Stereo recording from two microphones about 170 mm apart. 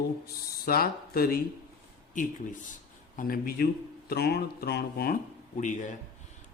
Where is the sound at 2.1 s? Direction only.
50° left (ahead or behind); by 5.2 s 65° left (ahead or behind).